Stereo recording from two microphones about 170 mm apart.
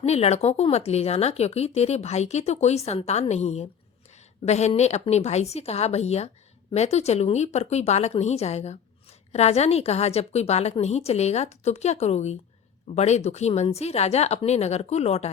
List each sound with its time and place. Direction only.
0.0 s speech: 40° left (ahead or behind)